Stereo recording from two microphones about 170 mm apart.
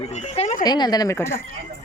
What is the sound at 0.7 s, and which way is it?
Speech, 25° left (ahead or behind).